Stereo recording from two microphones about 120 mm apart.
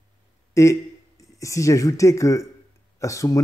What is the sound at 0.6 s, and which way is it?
Speech, 25° left (ahead or behind).